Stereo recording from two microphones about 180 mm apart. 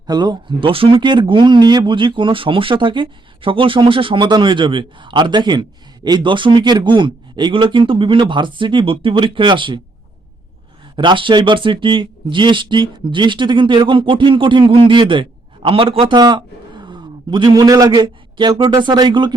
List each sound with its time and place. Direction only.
0.1 s speech: 25° right (ahead or behind)
10.9 s speech: 25° right (ahead or behind)